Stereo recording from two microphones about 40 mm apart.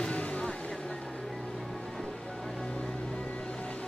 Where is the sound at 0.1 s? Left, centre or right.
Left.